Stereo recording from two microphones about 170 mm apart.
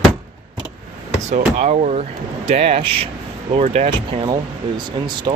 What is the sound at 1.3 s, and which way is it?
Speech, 40° right (ahead or behind).